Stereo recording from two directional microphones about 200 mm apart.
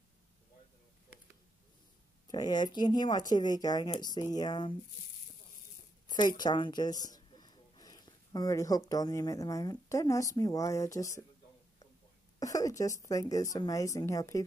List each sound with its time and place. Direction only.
2.2 s speech: 20° left (ahead or behind)
6.0 s speech: 20° left (ahead or behind)
12.4 s a woman's voice: 15° left (ahead or behind)